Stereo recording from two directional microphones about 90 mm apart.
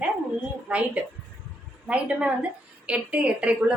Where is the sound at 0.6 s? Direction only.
15° right (ahead or behind).